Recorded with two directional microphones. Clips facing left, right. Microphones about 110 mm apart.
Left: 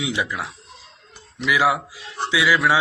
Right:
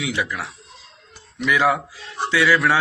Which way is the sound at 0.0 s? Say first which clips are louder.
Even; 20° left (ahead or behind).